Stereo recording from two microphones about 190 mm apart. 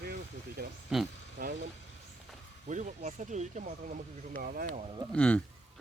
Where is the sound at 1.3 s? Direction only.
50° right (ahead or behind).